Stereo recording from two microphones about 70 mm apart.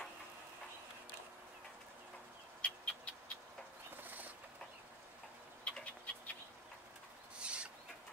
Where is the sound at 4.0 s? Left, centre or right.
Right.